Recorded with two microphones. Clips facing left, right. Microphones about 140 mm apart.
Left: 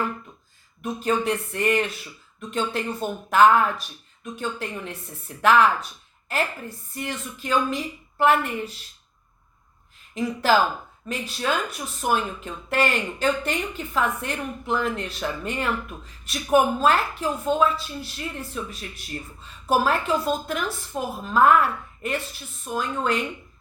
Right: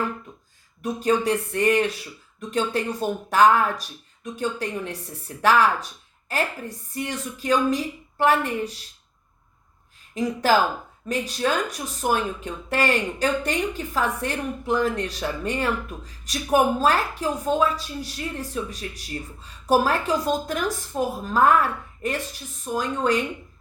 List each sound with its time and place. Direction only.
0.8 s speech: 35° right (ahead or behind)
10.2 s speech: 40° right (ahead or behind)